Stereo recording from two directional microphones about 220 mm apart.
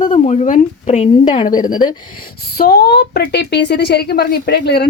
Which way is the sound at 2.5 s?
45° left (ahead or behind).